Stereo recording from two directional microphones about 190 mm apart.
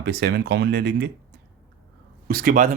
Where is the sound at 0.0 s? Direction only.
60° right (ahead or behind).